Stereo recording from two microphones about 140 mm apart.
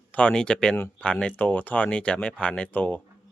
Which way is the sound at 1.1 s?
5° left (ahead or behind).